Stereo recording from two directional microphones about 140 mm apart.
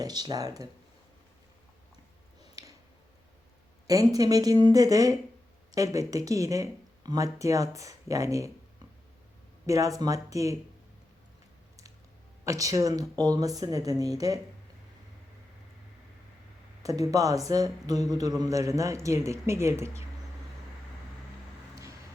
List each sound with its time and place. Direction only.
0.0 s a man's voice: 30° right (ahead or behind)
2.4 s a sound: 25° right (ahead or behind)
3.8 s a man's voice: 25° right (ahead or behind)
9.6 s a man's voice: 25° right (ahead or behind)
12.5 s a man's voice: 25° right (ahead or behind)
16.8 s a man's voice: 25° right (ahead or behind)